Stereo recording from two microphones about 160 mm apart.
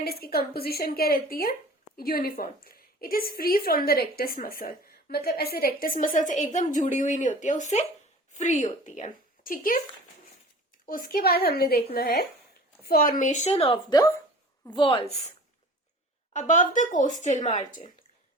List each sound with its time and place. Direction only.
0.0 s a woman's voice: 70° left (ahead or behind)
10.8 s a woman's voice: 60° left (ahead or behind); by 15.3 s 40° left (ahead or behind)
16.3 s speech: 50° left (ahead or behind)